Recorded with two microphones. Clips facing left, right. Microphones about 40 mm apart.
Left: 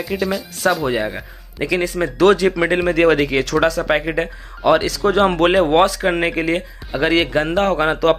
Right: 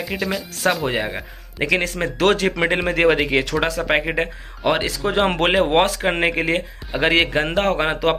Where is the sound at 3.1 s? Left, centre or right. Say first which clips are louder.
Left 2 dB; right.